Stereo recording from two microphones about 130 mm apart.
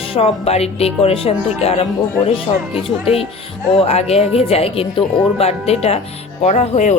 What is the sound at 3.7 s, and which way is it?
Speech, 50° left (ahead or behind).